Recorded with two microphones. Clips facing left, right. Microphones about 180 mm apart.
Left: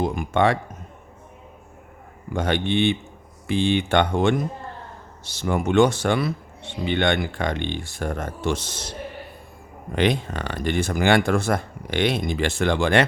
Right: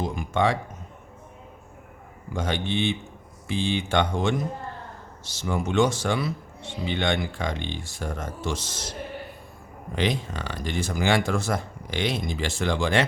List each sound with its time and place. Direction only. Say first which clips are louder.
0.0 s a man's voice: left 4 dB; 60° left (ahead or behind)
2.3 s speech: left 5 dB; 60° left (ahead or behind)
9.9 s speech: left 5 dB; 60° left (ahead or behind)